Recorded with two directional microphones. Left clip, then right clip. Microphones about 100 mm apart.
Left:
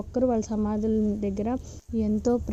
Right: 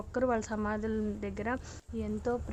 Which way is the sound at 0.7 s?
35° left (ahead or behind).